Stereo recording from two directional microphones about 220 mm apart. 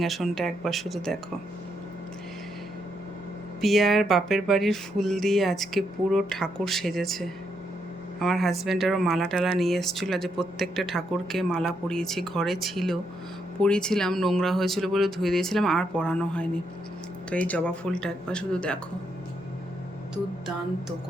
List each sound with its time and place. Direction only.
0.0 s speech: centre (ahead or behind)
3.6 s speech: centre (ahead or behind)